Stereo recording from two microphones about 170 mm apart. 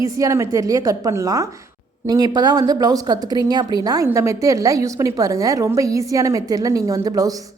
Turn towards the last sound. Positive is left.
turn(degrees=-20)  # may be behind; listen again after turning